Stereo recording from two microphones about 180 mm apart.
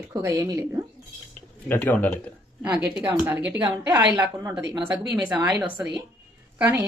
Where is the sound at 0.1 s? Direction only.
15° right (ahead or behind).